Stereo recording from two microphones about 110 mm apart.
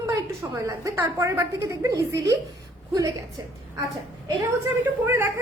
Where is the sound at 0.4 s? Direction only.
25° right (ahead or behind).